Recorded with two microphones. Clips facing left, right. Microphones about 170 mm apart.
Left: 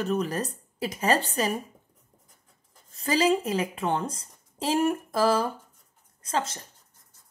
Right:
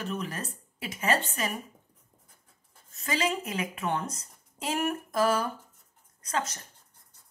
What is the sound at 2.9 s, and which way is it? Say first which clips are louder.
A woman's voice: left 7 dB; 35° left (ahead or behind).